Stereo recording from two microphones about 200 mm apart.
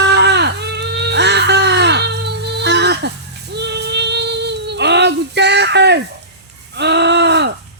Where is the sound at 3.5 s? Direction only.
55° right (ahead or behind).